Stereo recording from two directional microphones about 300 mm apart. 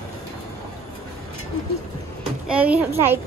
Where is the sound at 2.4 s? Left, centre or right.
Centre.